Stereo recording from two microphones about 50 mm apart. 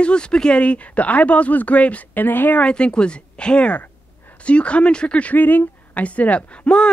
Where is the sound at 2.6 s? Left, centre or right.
Centre.